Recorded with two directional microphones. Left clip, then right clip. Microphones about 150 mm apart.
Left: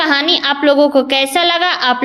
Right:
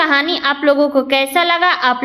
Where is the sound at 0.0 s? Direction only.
35° left (ahead or behind).